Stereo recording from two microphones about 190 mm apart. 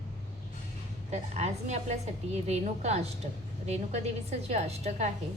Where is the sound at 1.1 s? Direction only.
35° right (ahead or behind).